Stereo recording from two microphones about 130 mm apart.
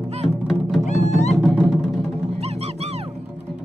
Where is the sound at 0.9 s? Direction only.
60° left (ahead or behind).